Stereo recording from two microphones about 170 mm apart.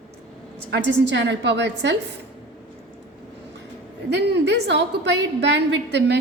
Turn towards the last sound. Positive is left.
turn(degrees=-90)